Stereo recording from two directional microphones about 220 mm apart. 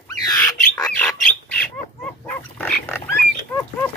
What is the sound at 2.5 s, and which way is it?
Pig, 5° left (ahead or behind).